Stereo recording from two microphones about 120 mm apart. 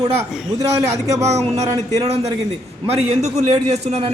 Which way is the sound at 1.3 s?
65° right (ahead or behind).